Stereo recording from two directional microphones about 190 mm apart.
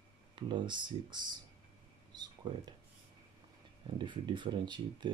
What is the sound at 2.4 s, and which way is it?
Speech, 25° right (ahead or behind).